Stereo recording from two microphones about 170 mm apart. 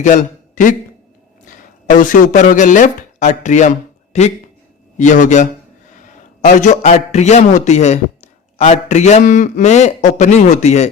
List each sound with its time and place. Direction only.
0.0 s a man's voice: 45° left (ahead or behind)